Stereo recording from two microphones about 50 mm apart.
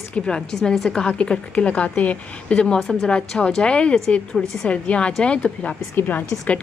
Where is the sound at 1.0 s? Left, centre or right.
Left.